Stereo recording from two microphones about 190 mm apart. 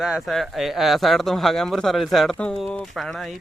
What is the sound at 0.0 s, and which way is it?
A man's voice, centre (ahead or behind).